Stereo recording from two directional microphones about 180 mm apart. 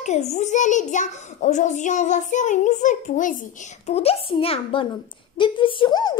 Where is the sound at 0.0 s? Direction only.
40° left (ahead or behind).